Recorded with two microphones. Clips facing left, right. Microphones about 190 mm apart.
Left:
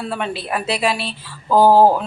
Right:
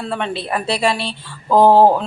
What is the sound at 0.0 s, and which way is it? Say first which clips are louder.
Speech: right 1 dB; 5° left (ahead or behind).